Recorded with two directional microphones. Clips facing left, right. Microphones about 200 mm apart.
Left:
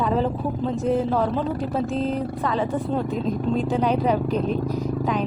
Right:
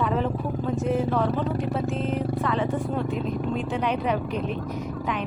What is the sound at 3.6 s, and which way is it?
Speech, 35° left (ahead or behind).